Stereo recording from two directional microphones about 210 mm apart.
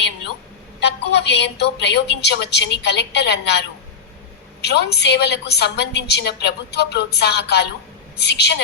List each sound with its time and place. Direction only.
0.8 s a woman's voice: 55° left (ahead or behind)